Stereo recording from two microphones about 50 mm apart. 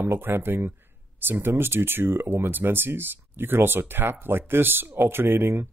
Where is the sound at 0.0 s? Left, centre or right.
Right.